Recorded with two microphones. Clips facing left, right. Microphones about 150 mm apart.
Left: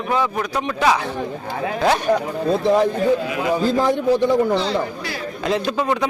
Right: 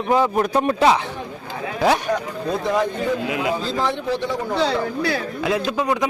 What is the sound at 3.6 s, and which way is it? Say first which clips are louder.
Speech: left 6 dB; 45° left (ahead or behind).